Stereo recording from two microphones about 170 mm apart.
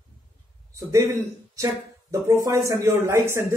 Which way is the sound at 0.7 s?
15° right (ahead or behind).